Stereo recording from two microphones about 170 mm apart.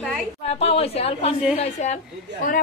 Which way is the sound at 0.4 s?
35° left (ahead or behind).